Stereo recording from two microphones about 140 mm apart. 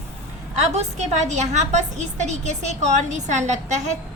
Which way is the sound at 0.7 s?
55° right (ahead or behind).